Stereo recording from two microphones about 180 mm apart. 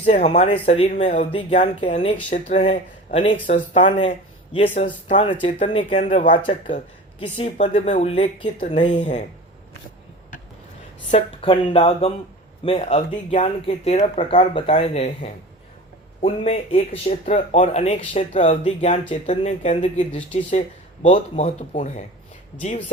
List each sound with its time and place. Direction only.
0.0 s speech: 35° left (ahead or behind)
5.5 s speech: 40° left (ahead or behind)
11.1 s speech: 30° left (ahead or behind)